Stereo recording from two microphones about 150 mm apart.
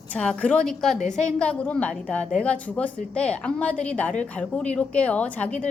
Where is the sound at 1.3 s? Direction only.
5° left (ahead or behind).